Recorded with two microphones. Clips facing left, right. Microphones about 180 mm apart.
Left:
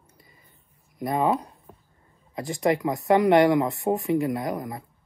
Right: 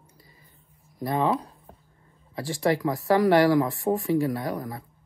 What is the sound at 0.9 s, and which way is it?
Speech, centre (ahead or behind).